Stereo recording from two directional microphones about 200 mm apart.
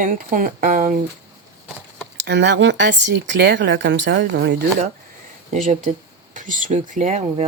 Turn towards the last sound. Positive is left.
turn(degrees=-35)  # may be behind; listen again after turning